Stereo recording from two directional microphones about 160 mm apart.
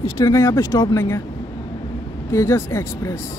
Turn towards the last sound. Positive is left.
turn(degrees=15)  # may be behind; listen again after turning